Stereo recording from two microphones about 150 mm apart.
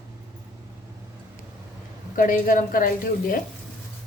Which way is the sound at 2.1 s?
60° left (ahead or behind).